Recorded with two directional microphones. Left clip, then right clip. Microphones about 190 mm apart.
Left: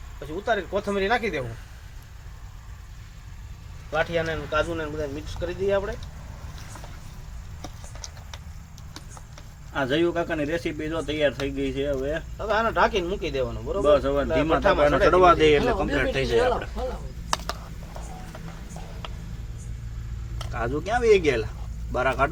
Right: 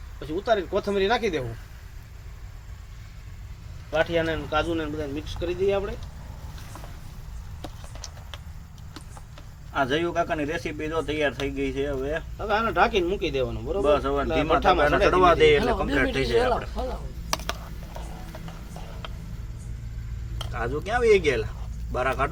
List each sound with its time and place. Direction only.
0.4 s speech: 50° right (ahead or behind)
3.9 s speech: 40° right (ahead or behind)
9.7 s speech: 25° left (ahead or behind)
12.4 s speech: 35° right (ahead or behind)
13.8 s speech: 30° left (ahead or behind)
14.3 s speech: 40° right (ahead or behind)
15.1 s speech: 30° left (ahead or behind)
15.5 s speech: 20° right (ahead or behind)
17.4 s a sound: 5° right (ahead or behind)
20.5 s speech: 25° left (ahead or behind)